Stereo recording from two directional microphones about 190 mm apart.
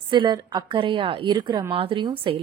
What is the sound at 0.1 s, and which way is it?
A woman's voice, 25° right (ahead or behind).